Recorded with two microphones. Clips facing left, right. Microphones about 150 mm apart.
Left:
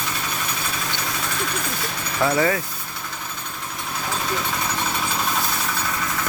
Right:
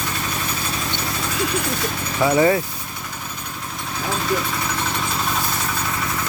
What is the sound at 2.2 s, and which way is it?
Speech, 20° right (ahead or behind).